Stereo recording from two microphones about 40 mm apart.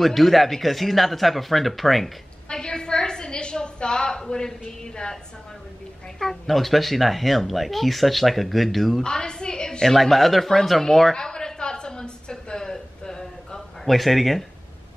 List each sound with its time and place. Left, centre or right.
0.0 s speech: centre
2.5 s a woman's voice: centre
6.1 s speech: centre
9.0 s a sound: centre
9.9 s speech: centre
11.1 s a sound: centre
13.8 s speech: centre